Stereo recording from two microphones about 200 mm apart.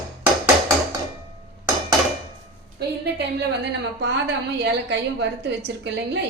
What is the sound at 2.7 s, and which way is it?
A woman's voice, 55° right (ahead or behind).